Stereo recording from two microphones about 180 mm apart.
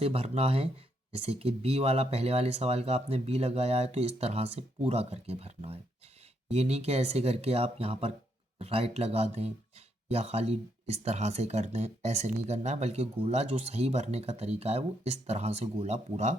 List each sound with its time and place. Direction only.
0.0 s speech: 35° right (ahead or behind)